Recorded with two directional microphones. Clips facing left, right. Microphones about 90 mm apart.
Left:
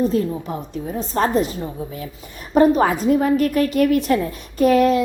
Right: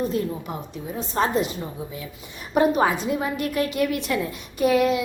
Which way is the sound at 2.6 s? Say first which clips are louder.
Left 5 dB; 40° left (ahead or behind).